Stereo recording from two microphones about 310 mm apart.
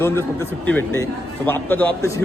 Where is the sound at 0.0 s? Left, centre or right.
Centre.